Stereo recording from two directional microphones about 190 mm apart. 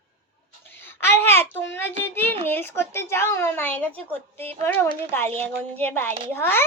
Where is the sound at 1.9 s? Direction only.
30° right (ahead or behind).